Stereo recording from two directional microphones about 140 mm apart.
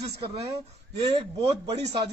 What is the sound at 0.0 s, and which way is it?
A man's voice, 45° right (ahead or behind).